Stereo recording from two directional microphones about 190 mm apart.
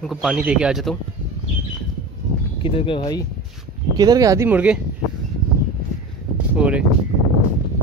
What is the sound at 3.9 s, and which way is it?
Speech, 20° right (ahead or behind).